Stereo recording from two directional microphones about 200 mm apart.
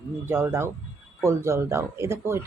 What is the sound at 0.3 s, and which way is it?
Speech, 10° right (ahead or behind).